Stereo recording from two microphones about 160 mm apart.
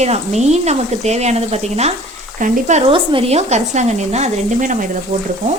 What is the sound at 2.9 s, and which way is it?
Speech, 35° right (ahead or behind).